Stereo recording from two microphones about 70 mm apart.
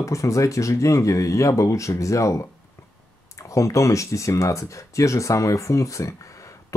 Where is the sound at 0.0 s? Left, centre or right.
Left.